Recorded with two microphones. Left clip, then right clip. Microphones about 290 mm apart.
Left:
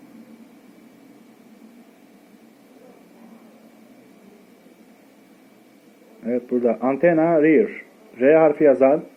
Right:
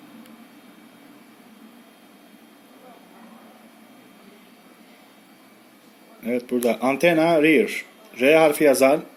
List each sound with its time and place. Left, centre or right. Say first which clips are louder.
6.2 s speech: left 2 dB; right